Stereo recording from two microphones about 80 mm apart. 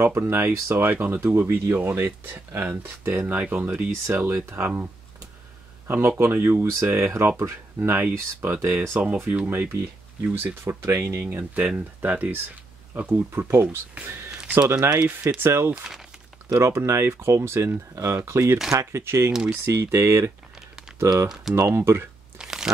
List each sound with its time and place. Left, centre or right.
0.0 s speech: right
5.9 s speech: right
6.6 s speech: right
9.0 s speech: right
11.2 s speech: right
21.5 s speech: right
22.4 s crunch: centre